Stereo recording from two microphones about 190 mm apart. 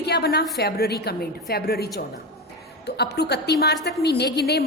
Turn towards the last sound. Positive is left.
turn(degrees=60)  # may be behind; listen again after turning